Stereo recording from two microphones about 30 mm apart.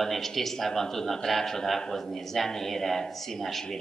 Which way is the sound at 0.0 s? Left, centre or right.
Centre.